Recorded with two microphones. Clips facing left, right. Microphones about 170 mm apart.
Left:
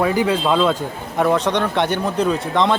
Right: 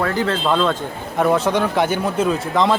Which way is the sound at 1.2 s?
5° right (ahead or behind).